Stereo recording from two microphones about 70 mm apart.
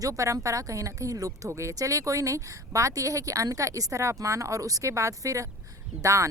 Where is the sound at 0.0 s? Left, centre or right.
Right.